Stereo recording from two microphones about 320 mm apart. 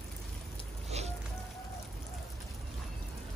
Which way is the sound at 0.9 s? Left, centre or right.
Centre.